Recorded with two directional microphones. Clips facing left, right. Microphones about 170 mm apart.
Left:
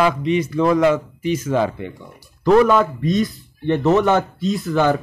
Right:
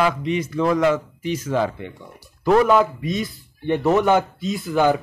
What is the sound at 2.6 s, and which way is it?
Speech, 5° right (ahead or behind).